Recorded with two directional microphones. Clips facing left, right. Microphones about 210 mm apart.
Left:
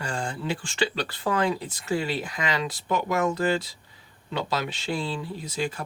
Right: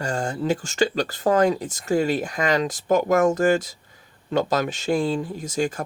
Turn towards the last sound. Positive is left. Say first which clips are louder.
# right 5 dB
turn(degrees=-45)  # may be behind; listen again after turning